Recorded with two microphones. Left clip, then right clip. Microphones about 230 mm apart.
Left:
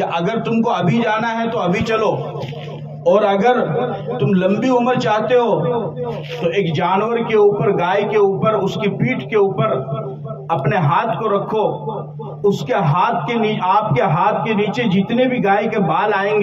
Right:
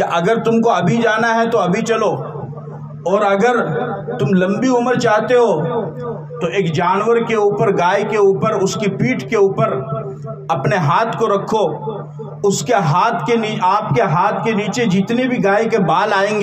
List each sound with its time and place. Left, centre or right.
0.0 s a man's voice: right